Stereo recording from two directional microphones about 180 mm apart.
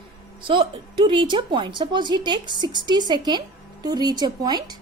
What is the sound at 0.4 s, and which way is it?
Speech, 30° right (ahead or behind).